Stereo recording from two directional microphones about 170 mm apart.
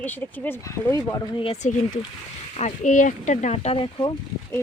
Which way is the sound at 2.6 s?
45° left (ahead or behind).